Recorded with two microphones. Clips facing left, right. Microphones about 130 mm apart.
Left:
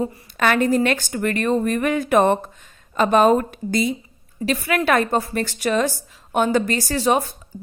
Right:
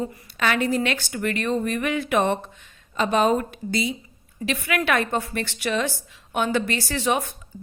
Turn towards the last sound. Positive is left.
turn(degrees=35)  # may be behind; listen again after turning